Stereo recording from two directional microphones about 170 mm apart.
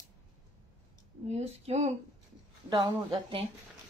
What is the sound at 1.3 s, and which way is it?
Speech, 40° right (ahead or behind).